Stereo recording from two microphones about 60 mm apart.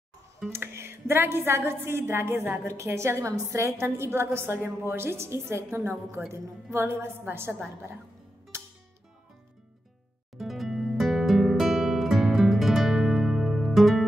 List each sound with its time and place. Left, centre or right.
0.5 s a woman's voice: right
8.5 s music: right
10.3 s music: centre